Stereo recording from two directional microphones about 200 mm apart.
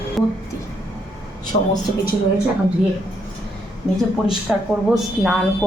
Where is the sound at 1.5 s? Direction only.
40° left (ahead or behind).